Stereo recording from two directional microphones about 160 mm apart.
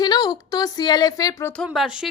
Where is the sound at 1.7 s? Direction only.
5° right (ahead or behind).